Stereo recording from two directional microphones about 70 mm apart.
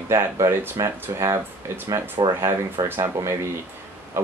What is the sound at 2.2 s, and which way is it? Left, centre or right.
Speech, right.